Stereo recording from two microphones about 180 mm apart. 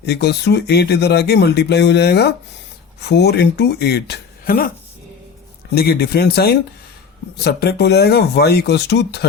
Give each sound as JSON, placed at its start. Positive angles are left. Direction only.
{"t": 0.0, "sound": "speech", "side_deg": 65}
{"t": 5.7, "sound": "speech", "side_deg": 60}